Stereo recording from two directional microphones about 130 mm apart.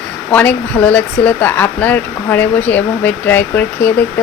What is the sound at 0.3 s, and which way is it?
Speech, 10° left (ahead or behind).